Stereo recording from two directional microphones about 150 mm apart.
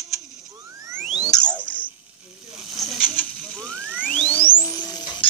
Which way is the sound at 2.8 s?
Centre (ahead or behind).